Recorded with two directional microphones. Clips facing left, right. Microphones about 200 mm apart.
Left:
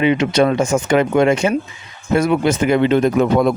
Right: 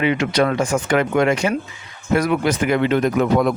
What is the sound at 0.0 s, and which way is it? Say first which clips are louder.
Speech: left 4 dB; 20° left (ahead or behind).